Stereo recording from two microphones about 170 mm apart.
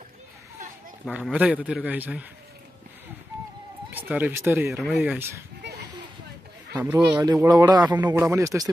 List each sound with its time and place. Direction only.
1.0 s a man's voice: 5° right (ahead or behind)
3.9 s speech: 10° right (ahead or behind)
6.8 s a man's voice: 20° right (ahead or behind)